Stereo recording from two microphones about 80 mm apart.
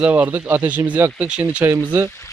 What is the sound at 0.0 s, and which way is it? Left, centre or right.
Speech, right.